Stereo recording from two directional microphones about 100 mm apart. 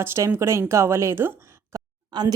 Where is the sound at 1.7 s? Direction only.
40° right (ahead or behind).